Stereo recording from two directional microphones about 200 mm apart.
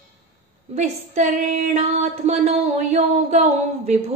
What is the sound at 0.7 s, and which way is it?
A woman's voice, 35° right (ahead or behind).